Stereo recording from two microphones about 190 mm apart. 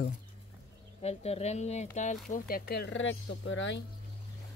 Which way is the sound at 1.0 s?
35° left (ahead or behind).